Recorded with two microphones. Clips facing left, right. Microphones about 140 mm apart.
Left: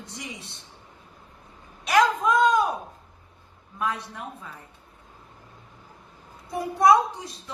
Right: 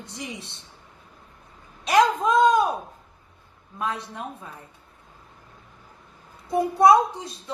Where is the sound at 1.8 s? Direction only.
25° right (ahead or behind).